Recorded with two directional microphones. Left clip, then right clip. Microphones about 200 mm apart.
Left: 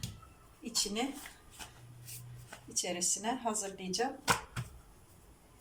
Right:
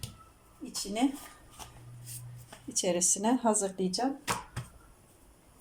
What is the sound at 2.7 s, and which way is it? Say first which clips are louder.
Speech: right 6 dB; 40° right (ahead or behind).